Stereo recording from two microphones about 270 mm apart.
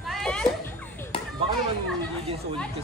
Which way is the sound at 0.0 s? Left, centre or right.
Centre.